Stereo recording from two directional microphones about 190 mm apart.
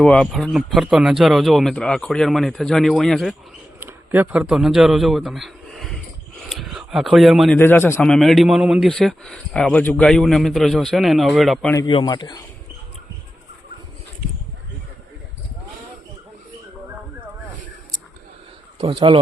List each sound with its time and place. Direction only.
0.0 s a man's voice: 5° left (ahead or behind)
3.8 s a man's voice: 10° right (ahead or behind)
7.6 s speech: 10° left (ahead or behind)
8.1 s a man's voice: centre (ahead or behind)
11.9 s a man's voice: 25° left (ahead or behind)
18.8 s speech: 25° right (ahead or behind)